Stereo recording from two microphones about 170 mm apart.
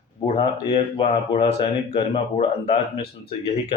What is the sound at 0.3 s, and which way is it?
A man's voice, 35° left (ahead or behind).